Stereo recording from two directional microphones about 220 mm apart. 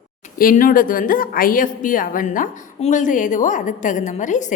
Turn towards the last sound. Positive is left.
turn(degrees=35)  # may be behind; listen again after turning